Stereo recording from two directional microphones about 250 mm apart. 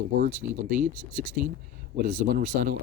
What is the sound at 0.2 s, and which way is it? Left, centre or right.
Speech, right.